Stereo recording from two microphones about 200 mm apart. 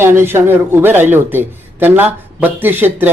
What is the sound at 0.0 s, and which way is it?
A man's voice, 10° right (ahead or behind).